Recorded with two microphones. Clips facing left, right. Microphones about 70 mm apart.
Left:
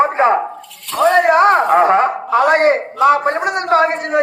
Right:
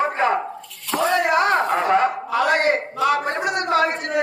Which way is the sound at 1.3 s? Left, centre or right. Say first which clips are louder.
Left 7 dB; left.